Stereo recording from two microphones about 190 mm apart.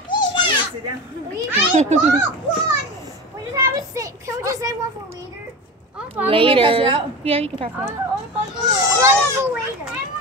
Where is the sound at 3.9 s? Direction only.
15° right (ahead or behind).